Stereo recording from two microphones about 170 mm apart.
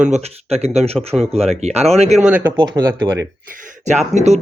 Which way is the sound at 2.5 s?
25° right (ahead or behind).